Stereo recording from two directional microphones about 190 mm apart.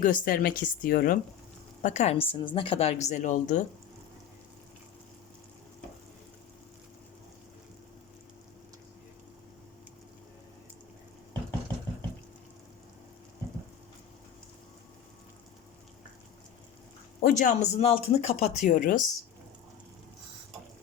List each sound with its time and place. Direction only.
0.0 s a woman's voice: 45° left (ahead or behind)
1.8 s a woman's voice: 35° left (ahead or behind)
17.2 s a woman's voice: 45° left (ahead or behind)